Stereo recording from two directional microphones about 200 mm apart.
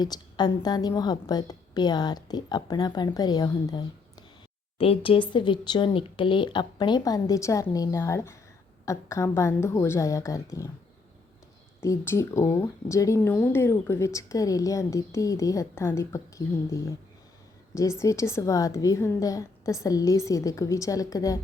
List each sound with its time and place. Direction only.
0.0 s a woman's voice: 20° left (ahead or behind)
11.8 s speech: 15° left (ahead or behind)
18.0 s speech: 15° left (ahead or behind)